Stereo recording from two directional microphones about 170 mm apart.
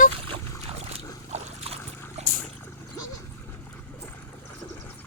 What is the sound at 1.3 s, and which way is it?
Dog, 35° right (ahead or behind).